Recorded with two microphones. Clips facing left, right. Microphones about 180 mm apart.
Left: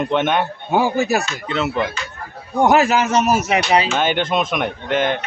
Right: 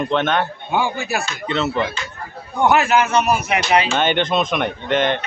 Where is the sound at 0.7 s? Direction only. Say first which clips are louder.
Left 6 dB; 40° left (ahead or behind).